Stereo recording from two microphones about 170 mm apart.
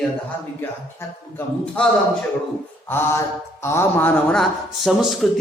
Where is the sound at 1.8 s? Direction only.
5° left (ahead or behind).